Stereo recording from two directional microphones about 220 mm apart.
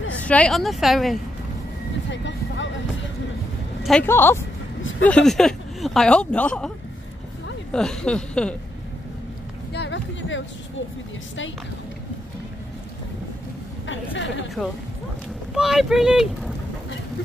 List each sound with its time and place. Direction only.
0.2 s speech: 5° left (ahead or behind)
2.0 s vehicle: 55° left (ahead or behind)
3.8 s speech: 5° left (ahead or behind)
7.7 s speech: 5° left (ahead or behind)
9.7 s a sound: 50° left (ahead or behind)
13.8 s a woman's voice: 55° left (ahead or behind)
15.5 s speech: centre (ahead or behind)